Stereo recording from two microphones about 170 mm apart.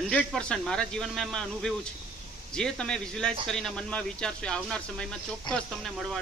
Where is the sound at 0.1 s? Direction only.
5° left (ahead or behind).